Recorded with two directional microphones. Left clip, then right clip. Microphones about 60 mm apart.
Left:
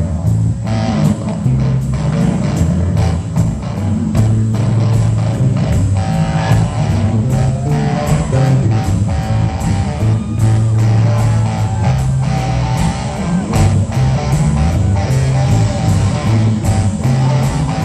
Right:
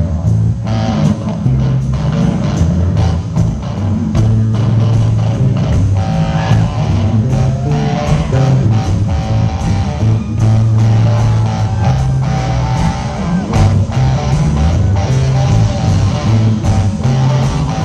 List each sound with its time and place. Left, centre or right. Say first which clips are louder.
0.8 s music: right 1 dB; centre
7.7 s music: right 1 dB; centre